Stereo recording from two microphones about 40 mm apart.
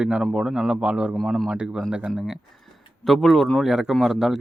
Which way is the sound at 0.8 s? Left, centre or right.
Right.